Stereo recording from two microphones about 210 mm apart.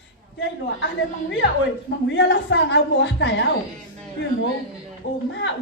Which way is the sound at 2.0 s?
55° left (ahead or behind).